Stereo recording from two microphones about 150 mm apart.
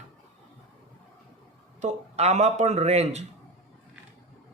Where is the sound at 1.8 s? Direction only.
50° right (ahead or behind).